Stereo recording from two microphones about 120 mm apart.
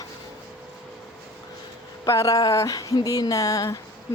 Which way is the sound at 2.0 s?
30° left (ahead or behind).